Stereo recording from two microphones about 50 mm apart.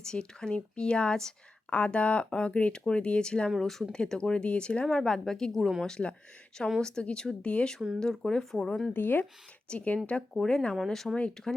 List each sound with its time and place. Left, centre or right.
0.0 s speech: centre
1.7 s speech: left
3.6 s speech: centre
4.9 s speech: centre
6.8 s speech: centre
8.9 s speech: left
9.6 s speech: left; by 11.2 s centre